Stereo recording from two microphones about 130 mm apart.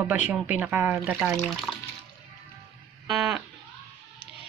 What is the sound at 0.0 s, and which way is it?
Speech, 15° right (ahead or behind).